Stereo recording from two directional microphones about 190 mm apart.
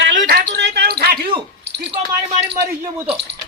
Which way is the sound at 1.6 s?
60° right (ahead or behind).